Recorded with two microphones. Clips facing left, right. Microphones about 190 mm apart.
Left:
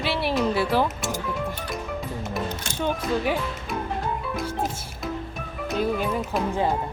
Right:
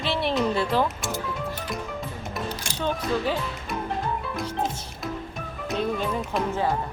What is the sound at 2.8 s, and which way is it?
Speech, 15° left (ahead or behind).